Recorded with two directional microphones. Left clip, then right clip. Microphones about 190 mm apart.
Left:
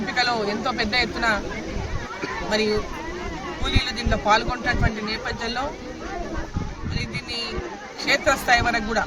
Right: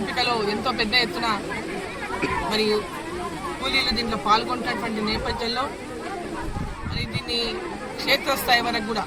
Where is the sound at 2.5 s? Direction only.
Centre (ahead or behind).